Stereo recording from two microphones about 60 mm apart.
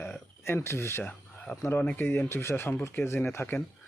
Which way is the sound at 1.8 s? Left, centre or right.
Left.